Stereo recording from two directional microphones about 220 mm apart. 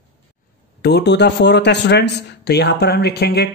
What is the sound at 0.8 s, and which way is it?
Speech, 50° left (ahead or behind).